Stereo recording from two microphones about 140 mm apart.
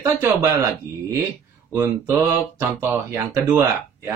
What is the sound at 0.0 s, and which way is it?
Speech, 20° right (ahead or behind).